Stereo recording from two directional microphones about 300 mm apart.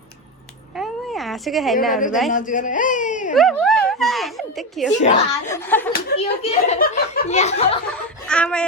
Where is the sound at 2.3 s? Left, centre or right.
Left.